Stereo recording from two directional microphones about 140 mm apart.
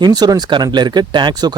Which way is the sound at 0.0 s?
30° right (ahead or behind).